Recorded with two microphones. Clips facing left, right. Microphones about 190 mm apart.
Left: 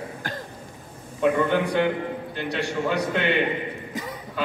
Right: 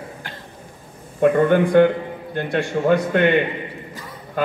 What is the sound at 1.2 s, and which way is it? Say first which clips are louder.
A man's voice: right 6 dB; 50° right (ahead or behind).